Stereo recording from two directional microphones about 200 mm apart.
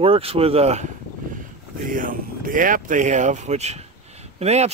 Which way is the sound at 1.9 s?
45° right (ahead or behind).